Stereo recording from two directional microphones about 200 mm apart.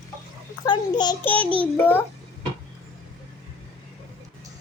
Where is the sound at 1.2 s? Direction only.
5° left (ahead or behind).